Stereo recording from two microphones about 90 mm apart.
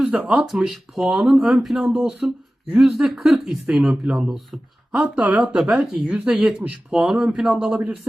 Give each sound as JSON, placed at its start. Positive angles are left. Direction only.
{"t": 0.0, "sound": "speech", "side_deg": -15}
{"t": 5.5, "sound": "speech", "side_deg": -5}